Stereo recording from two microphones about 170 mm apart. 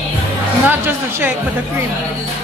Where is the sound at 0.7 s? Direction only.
10° right (ahead or behind).